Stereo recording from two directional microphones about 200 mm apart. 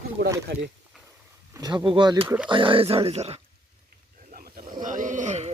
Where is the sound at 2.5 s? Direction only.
25° right (ahead or behind).